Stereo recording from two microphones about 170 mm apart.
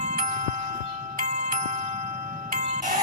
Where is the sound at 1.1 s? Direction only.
50° right (ahead or behind).